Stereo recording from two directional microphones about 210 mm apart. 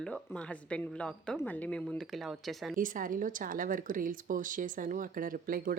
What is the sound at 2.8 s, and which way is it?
Speech, 40° right (ahead or behind).